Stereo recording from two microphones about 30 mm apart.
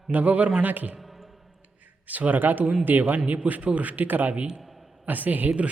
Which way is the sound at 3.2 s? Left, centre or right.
Right.